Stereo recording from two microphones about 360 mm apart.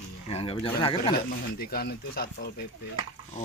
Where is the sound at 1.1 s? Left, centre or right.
Left.